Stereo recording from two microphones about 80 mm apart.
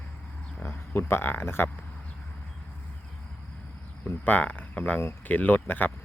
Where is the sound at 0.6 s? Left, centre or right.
Left.